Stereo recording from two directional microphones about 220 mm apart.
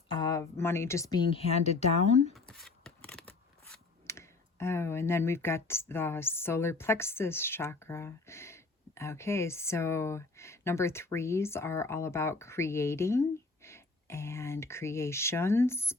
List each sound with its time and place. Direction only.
0.1 s speech: 20° left (ahead or behind)
2.3 s speech: centre (ahead or behind)